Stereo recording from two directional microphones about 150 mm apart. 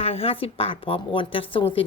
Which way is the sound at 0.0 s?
40° left (ahead or behind).